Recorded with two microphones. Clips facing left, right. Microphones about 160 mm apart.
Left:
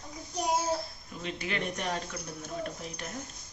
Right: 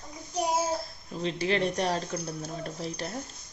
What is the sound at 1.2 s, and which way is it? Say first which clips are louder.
Speech: right 7 dB; 30° right (ahead or behind).